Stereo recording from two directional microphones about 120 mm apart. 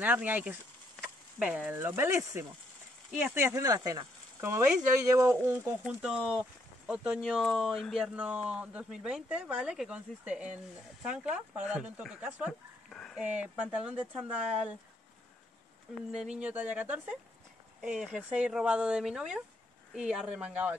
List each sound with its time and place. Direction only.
0.0 s speech: 15° right (ahead or behind)
5.9 s speech: 5° right (ahead or behind)
12.9 s speech: 5° left (ahead or behind)
13.2 s speech: 10° right (ahead or behind)
15.9 s speech: centre (ahead or behind)